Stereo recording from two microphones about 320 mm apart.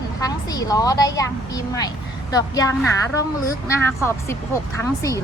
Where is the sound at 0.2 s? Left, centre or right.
Centre.